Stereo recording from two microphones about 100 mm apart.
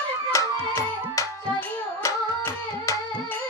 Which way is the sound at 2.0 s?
30° left (ahead or behind).